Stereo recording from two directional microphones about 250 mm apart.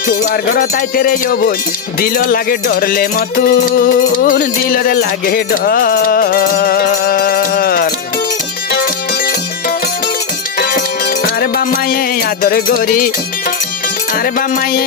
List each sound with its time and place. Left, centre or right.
0.1 s music: left
14.1 s music: left